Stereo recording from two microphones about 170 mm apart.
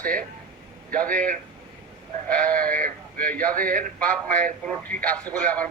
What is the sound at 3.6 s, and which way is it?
Speech, 55° right (ahead or behind).